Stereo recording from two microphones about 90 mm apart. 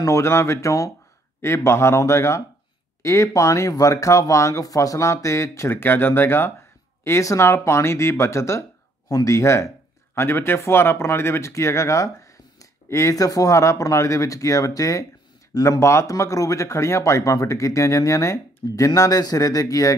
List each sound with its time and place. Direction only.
0.0 s speech: 35° left (ahead or behind)